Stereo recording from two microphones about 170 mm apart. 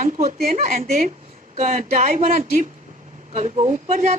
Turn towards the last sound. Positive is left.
turn(degrees=-40)  # may be behind; listen again after turning